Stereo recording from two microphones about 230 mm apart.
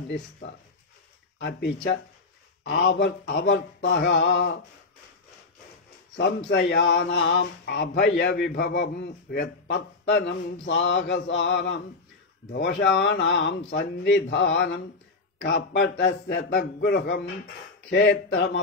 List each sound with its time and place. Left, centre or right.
1.4 s speech: left
6.1 s speech: left